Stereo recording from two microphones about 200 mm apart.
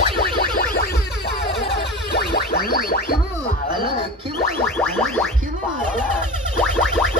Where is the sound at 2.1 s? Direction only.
50° left (ahead or behind).